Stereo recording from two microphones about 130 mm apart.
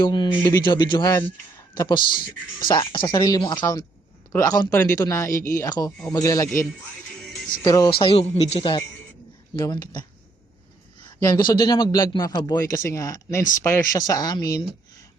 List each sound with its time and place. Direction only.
0.0 s a man's voice: 35° left (ahead or behind)
7.6 s speech: 30° left (ahead or behind)
7.9 s speech: 45° left (ahead or behind)
9.6 s a man's voice: 35° left (ahead or behind)
11.2 s a man's voice: 30° left (ahead or behind)